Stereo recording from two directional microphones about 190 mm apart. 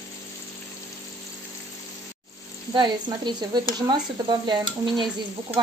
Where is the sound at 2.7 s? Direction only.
25° right (ahead or behind).